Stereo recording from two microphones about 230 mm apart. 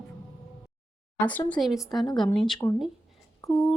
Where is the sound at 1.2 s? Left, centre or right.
Centre.